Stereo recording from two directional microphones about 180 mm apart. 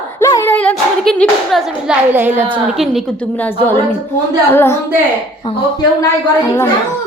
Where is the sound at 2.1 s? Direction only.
10° right (ahead or behind); by 4.8 s 15° left (ahead or behind).